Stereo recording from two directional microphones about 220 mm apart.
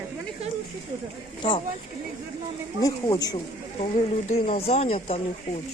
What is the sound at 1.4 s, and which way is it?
Speech, 20° left (ahead or behind).